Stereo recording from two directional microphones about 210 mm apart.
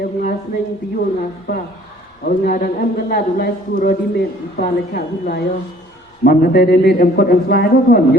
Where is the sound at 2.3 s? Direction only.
40° left (ahead or behind).